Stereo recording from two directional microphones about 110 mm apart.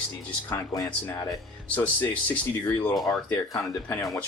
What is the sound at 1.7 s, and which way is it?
Speech, 15° left (ahead or behind).